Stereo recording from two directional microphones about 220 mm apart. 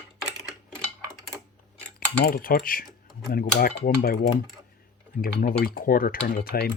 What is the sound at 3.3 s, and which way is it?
Cutlery, 40° left (ahead or behind).